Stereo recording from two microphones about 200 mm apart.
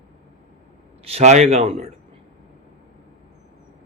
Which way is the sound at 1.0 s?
30° right (ahead or behind).